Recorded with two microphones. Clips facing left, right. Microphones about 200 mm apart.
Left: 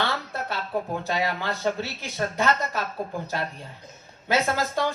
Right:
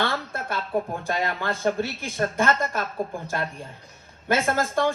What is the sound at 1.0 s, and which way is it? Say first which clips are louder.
A woman's voice: even; 50° right (ahead or behind).